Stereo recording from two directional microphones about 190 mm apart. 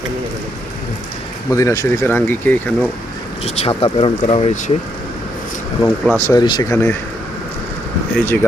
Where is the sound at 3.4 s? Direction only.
30° left (ahead or behind).